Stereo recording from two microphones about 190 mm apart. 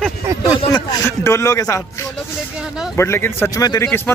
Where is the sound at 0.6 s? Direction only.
20° left (ahead or behind).